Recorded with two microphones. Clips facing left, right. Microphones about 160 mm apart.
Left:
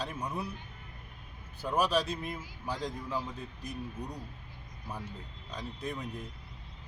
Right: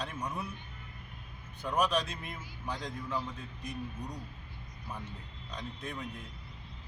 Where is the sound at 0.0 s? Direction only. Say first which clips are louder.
Left 1 dB; 5° left (ahead or behind).